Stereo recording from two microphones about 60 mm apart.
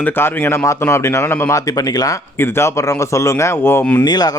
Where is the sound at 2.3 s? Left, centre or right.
Left.